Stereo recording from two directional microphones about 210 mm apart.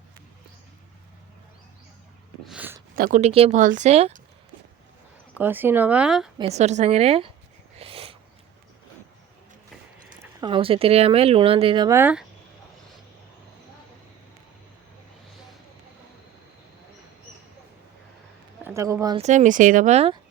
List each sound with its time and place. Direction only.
2.5 s speech: 5° right (ahead or behind)
2.9 s speech: 40° right (ahead or behind)
5.4 s speech: 10° right (ahead or behind)
6.4 s speech: 30° right (ahead or behind)
7.8 s a sound: 25° right (ahead or behind)
10.2 s speech: 20° right (ahead or behind)
11.9 s speech: 10° right (ahead or behind)
18.6 s speech: 15° right (ahead or behind)
19.1 s speech: 35° right (ahead or behind)